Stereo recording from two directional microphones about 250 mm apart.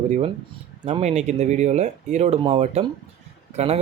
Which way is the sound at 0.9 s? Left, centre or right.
Right.